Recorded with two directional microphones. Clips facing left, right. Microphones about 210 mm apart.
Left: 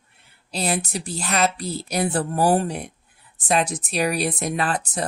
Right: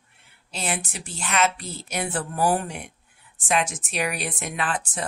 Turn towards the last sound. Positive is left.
turn(degrees=40)  # may be behind; listen again after turning